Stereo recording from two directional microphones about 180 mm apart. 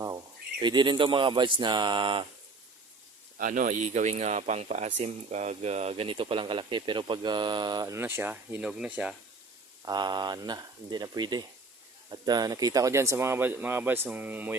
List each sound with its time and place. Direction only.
0.6 s speech: 25° right (ahead or behind)
3.3 s speech: 50° right (ahead or behind); by 9.1 s 5° right (ahead or behind)
9.8 s speech: 25° right (ahead or behind)